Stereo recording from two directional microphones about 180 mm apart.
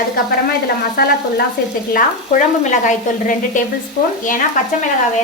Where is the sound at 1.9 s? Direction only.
45° left (ahead or behind).